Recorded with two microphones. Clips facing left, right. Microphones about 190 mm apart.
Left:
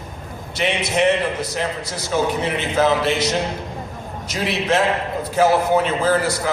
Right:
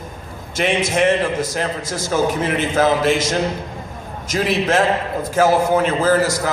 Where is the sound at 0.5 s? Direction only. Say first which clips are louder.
Right 3 dB; 45° right (ahead or behind).